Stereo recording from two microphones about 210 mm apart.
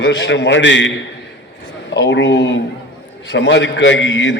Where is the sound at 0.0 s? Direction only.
55° left (ahead or behind).